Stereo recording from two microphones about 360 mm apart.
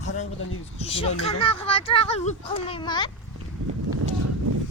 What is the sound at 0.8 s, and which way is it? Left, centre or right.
Speech, centre.